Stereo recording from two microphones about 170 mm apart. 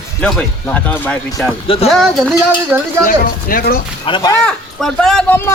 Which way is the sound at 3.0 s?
55° left (ahead or behind).